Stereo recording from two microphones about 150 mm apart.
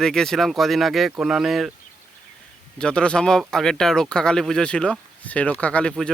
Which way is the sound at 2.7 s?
5° left (ahead or behind).